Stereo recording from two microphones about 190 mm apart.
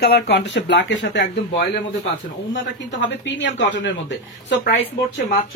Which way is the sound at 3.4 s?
65° left (ahead or behind).